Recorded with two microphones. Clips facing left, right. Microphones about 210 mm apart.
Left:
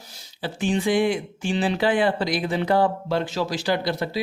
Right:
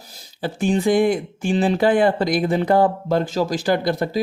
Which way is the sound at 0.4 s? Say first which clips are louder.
Right 4 dB; 40° right (ahead or behind).